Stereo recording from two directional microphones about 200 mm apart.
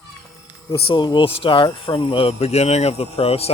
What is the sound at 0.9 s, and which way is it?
Speech, 20° left (ahead or behind).